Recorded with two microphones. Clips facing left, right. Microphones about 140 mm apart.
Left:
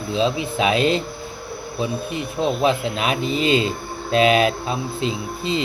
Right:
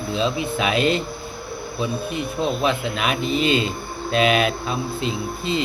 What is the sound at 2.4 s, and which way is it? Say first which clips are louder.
Speech: left 3 dB; 30° left (ahead or behind).